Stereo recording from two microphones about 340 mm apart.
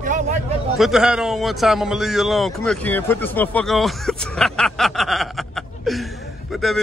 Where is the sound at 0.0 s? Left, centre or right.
Right.